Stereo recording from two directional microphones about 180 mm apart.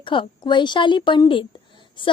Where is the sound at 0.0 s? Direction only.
25° left (ahead or behind).